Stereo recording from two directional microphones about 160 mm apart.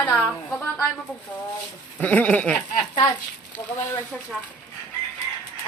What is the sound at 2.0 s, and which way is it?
Speech, 10° left (ahead or behind).